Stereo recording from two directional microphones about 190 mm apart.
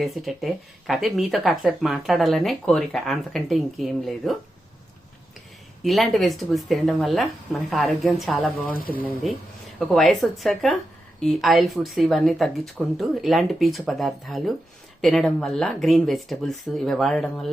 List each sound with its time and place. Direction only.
0.0 s speech: centre (ahead or behind)
5.8 s speech: centre (ahead or behind)
8.7 s speech: 50° left (ahead or behind)
9.2 s speech: centre (ahead or behind)